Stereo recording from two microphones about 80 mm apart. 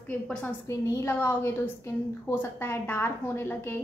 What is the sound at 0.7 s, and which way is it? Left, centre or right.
A woman's voice, left.